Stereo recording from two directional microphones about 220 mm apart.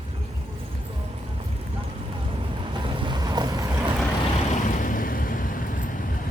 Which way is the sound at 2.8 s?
20° right (ahead or behind).